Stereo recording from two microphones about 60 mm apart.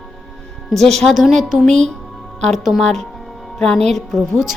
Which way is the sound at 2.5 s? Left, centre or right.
Centre.